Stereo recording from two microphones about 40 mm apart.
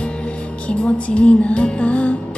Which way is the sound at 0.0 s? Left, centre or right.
Left.